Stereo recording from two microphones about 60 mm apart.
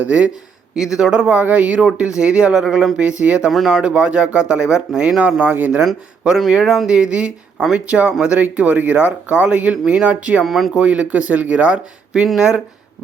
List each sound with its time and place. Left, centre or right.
0.0 s speech: right
0.8 s speech: centre
1.3 s speech: right; by 2.9 s centre
3.0 s speech: right
3.5 s speech: centre
3.8 s speech: centre
6.2 s speech: centre
10.4 s speech: centre
10.8 s speech: right